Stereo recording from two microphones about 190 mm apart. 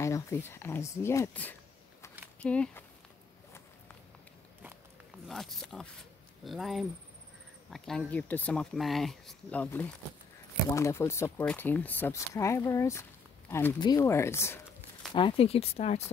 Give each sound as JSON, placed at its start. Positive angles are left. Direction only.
{"t": 0.0, "sound": "speech", "side_deg": 15}
{"t": 5.3, "sound": "speech", "side_deg": 0}
{"t": 15.1, "sound": "speech", "side_deg": 30}